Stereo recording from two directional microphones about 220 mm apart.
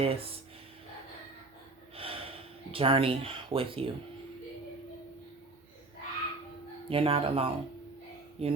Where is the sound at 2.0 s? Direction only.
25° right (ahead or behind).